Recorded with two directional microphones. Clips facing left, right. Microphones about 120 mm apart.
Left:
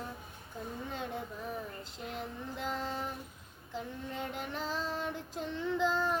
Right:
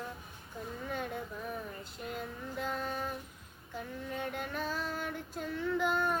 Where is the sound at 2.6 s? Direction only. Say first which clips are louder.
Right 1 dB; 25° left (ahead or behind).